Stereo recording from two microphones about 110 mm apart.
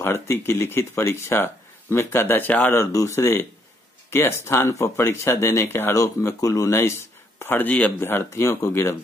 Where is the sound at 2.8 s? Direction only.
25° left (ahead or behind).